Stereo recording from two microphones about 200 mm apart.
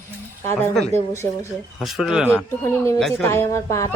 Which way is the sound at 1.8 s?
Centre (ahead or behind).